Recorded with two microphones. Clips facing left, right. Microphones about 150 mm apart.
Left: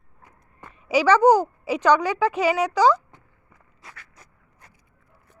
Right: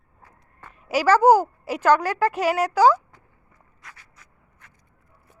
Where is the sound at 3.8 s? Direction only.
30° left (ahead or behind).